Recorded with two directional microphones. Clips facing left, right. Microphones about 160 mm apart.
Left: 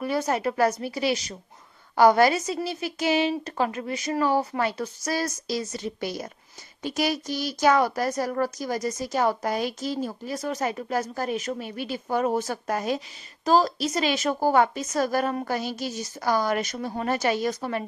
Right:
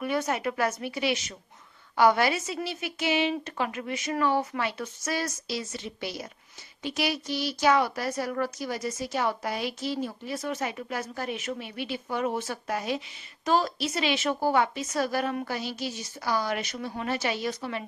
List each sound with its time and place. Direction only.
0.0 s a woman's voice: 35° left (ahead or behind)